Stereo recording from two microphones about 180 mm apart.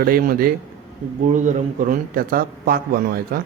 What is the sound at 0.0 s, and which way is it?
Speech, 55° right (ahead or behind).